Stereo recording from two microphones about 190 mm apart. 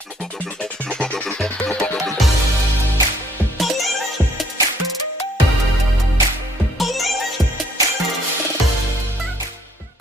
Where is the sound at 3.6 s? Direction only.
Centre (ahead or behind).